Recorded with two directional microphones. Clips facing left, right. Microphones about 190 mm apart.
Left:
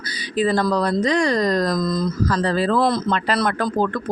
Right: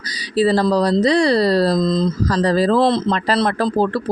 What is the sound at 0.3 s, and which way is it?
Speech, 35° right (ahead or behind).